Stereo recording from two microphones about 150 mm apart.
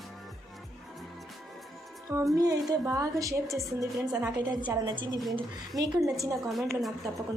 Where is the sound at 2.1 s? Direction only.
20° right (ahead or behind).